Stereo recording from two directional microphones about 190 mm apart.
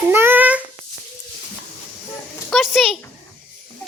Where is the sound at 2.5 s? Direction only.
Centre (ahead or behind).